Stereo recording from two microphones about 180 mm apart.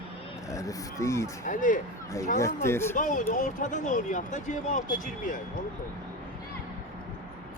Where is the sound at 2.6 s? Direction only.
15° left (ahead or behind).